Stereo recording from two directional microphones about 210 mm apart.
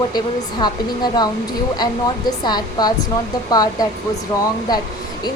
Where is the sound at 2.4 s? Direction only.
20° left (ahead or behind).